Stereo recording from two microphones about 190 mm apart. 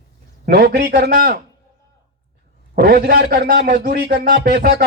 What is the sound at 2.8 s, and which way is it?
A man's voice, 55° right (ahead or behind).